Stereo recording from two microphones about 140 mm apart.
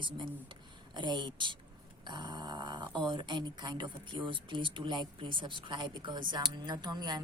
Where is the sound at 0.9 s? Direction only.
30° right (ahead or behind).